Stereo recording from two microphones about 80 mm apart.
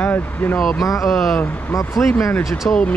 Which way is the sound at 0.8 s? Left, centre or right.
Left.